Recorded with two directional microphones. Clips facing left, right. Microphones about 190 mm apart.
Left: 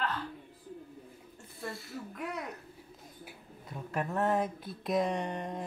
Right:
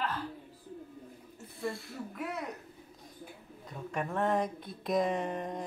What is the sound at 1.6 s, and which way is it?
Speech, centre (ahead or behind).